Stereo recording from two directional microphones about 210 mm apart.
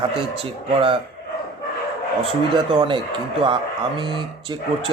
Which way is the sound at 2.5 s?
25° right (ahead or behind).